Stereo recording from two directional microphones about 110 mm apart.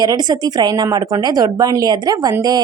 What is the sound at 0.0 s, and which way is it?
Speech, 40° right (ahead or behind).